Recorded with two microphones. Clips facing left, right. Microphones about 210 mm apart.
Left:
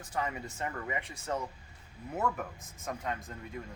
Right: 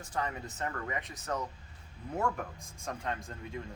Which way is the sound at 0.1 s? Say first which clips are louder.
Left 1 dB; 10° left (ahead or behind).